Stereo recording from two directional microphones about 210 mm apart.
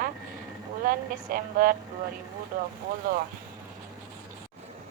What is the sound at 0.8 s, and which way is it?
Speech, 45° right (ahead or behind).